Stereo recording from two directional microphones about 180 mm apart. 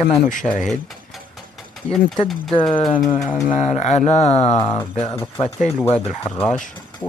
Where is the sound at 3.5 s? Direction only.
40° left (ahead or behind).